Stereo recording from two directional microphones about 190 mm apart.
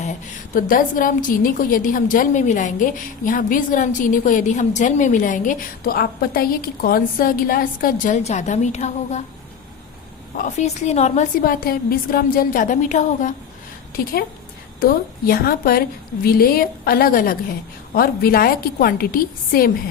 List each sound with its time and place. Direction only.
0.5 s a woman's voice: 45° left (ahead or behind)
10.3 s a woman's voice: 40° left (ahead or behind)
14.8 s a woman's voice: 50° left (ahead or behind)